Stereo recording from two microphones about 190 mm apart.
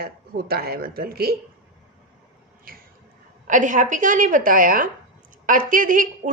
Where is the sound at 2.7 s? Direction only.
50° right (ahead or behind).